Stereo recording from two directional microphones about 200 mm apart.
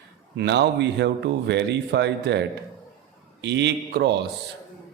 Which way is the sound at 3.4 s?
60° right (ahead or behind).